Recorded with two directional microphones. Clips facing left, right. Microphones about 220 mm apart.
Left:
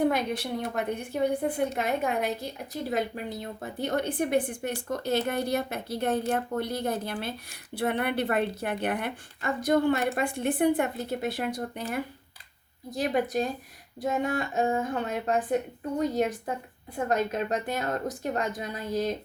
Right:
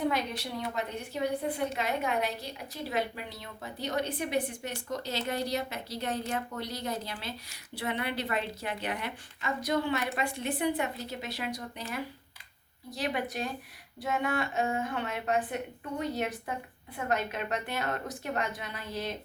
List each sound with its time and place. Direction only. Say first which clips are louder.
0.0 s a woman's voice: left 5 dB; 50° left (ahead or behind)